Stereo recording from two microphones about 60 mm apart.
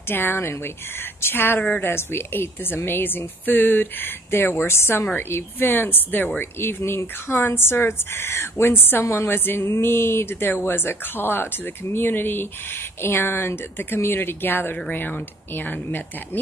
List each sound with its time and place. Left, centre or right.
0.1 s speech: left